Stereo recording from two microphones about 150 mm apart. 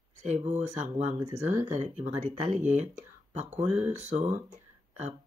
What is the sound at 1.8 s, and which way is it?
Speech, 45° right (ahead or behind).